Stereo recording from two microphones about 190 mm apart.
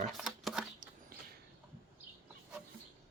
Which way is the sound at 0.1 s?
Centre (ahead or behind).